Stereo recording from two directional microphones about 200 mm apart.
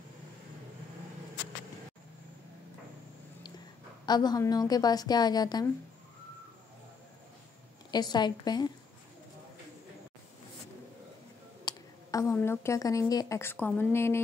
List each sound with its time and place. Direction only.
4.0 s a woman's voice: 20° left (ahead or behind)
7.9 s a woman's voice: 20° left (ahead or behind)
11.6 s a woman's voice: 15° left (ahead or behind)